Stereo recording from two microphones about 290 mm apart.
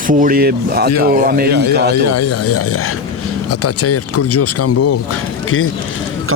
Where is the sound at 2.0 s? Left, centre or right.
Left.